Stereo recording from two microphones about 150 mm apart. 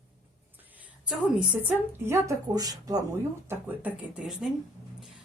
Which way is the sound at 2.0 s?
20° right (ahead or behind).